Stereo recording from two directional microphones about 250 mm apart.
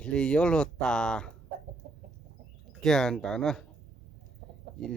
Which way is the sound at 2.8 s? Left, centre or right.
Centre.